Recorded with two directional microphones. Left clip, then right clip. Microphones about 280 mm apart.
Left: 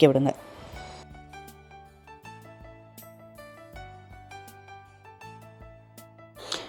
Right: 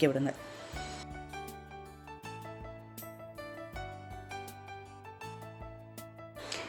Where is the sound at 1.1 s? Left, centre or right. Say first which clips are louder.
Right 2 dB; centre.